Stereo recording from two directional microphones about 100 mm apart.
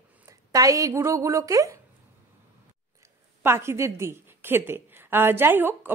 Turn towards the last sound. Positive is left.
turn(degrees=-20)  # may be behind; listen again after turning